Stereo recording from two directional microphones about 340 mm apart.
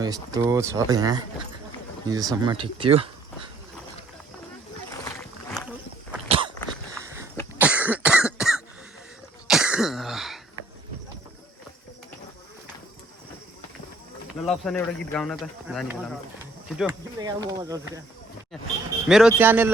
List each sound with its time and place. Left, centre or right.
0.0 s speech: centre
5.0 s boat: centre
6.2 s a sound: centre
7.6 s cough: centre
9.5 s throat clearing: centre
14.4 s speech: centre
19.0 s speech: centre